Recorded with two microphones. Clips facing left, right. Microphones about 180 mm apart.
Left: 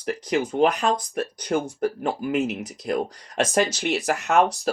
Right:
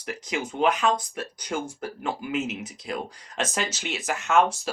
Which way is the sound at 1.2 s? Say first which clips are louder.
Left 6 dB; 55° left (ahead or behind).